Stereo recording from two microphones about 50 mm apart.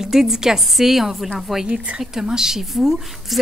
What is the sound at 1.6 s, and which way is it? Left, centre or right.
Speech, right.